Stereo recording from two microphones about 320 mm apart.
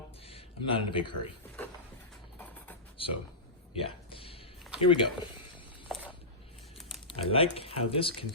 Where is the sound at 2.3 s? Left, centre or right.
Centre.